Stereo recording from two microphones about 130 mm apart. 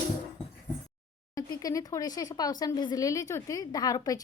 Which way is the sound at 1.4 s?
30° left (ahead or behind).